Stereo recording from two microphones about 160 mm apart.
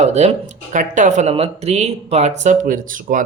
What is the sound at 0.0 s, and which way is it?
Speech, 45° right (ahead or behind).